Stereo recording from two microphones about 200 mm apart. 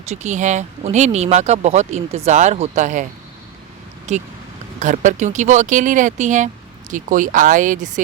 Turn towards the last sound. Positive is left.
turn(degrees=-40)  # may be behind; listen again after turning